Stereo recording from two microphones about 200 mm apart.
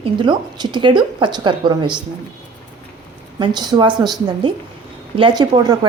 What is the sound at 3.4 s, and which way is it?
Speech, 20° right (ahead or behind).